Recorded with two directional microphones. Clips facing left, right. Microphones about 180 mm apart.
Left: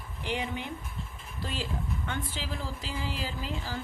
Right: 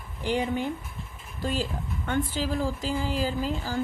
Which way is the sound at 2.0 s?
45° right (ahead or behind).